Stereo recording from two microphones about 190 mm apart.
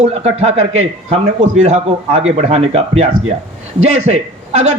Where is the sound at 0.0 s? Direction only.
35° right (ahead or behind).